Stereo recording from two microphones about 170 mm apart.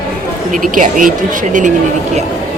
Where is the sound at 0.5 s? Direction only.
50° right (ahead or behind).